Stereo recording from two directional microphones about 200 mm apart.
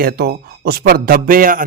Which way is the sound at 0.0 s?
50° right (ahead or behind).